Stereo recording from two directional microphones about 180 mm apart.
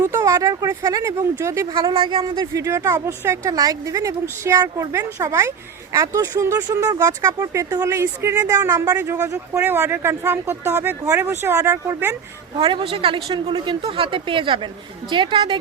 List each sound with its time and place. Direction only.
0.0 s speech: 15° right (ahead or behind)
12.5 s speech: 30° right (ahead or behind)